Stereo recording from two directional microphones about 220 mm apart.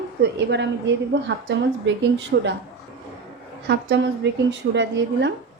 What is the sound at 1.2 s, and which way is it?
A woman's voice, 55° right (ahead or behind).